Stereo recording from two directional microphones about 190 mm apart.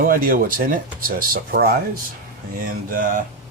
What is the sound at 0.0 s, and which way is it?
Speech, 50° right (ahead or behind).